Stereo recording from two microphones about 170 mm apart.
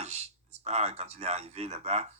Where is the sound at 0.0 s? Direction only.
40° right (ahead or behind).